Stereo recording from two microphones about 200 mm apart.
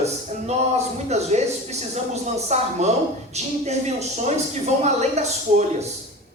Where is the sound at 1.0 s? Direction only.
35° right (ahead or behind).